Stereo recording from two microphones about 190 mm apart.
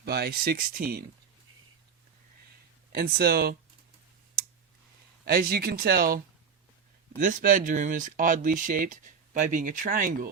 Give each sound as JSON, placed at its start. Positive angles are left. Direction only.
{"t": 0.0, "sound": "speech", "side_deg": -55}
{"t": 2.9, "sound": "speech", "side_deg": -55}
{"t": 5.2, "sound": "speech", "side_deg": -50}